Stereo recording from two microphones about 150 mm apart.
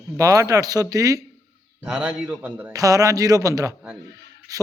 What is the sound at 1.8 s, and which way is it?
Speech, 10° right (ahead or behind).